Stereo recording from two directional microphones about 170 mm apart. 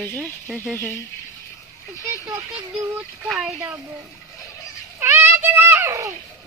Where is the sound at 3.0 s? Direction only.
5° right (ahead or behind).